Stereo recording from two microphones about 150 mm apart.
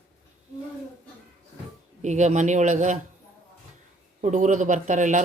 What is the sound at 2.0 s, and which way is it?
Speech, 50° right (ahead or behind).